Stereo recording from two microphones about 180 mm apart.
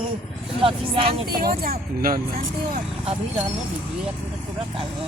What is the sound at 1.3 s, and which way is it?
Speech, 55° right (ahead or behind).